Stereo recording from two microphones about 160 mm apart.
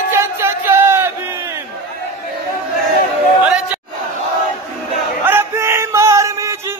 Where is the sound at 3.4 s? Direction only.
5° right (ahead or behind).